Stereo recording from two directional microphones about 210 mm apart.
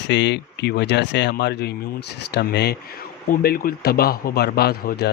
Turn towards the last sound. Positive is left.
turn(degrees=50)  # may be behind; listen again after turning